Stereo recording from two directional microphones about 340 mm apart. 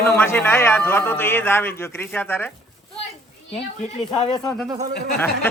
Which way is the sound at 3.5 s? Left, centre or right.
Centre.